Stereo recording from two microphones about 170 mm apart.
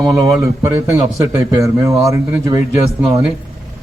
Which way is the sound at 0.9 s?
15° right (ahead or behind).